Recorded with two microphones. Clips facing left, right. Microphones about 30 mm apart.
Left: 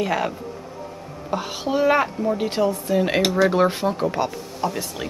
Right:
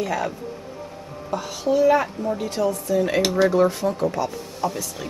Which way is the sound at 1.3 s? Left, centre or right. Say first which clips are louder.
Right 2 dB; left.